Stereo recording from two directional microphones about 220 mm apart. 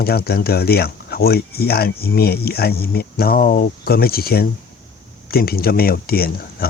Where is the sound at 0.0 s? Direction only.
45° left (ahead or behind).